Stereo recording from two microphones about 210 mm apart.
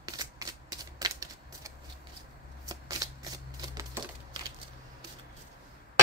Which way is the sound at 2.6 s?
15° right (ahead or behind).